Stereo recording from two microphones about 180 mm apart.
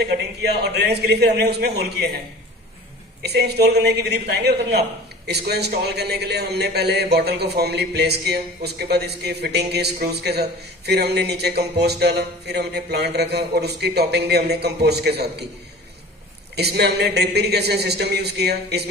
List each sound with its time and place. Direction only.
0.1 s a man's voice: 65° right (ahead or behind)
3.3 s a man's voice: 65° right (ahead or behind)
16.5 s a man's voice: 65° right (ahead or behind)